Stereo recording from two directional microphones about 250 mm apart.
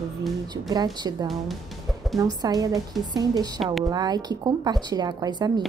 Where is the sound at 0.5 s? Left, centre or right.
Centre.